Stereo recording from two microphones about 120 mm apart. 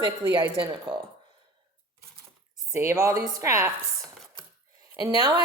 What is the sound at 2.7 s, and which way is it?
Speech, 25° right (ahead or behind).